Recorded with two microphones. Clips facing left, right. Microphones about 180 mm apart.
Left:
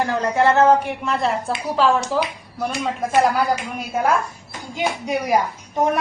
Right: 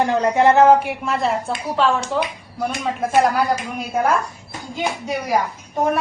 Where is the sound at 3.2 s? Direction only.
Centre (ahead or behind).